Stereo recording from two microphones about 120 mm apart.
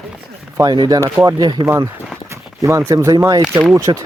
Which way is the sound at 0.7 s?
40° right (ahead or behind).